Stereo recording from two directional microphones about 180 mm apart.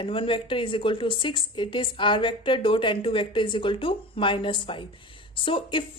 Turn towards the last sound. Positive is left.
turn(degrees=30)  # may be behind; listen again after turning